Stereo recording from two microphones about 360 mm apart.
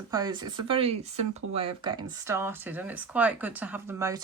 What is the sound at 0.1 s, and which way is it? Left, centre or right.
Speech, centre.